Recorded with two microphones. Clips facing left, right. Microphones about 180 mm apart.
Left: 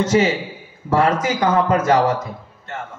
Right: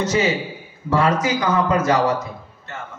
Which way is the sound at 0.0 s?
50° left (ahead or behind).